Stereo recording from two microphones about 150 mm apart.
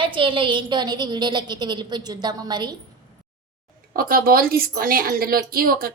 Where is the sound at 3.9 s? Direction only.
75° right (ahead or behind).